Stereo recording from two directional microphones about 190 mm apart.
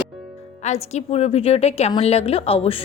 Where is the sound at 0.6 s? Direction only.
35° left (ahead or behind).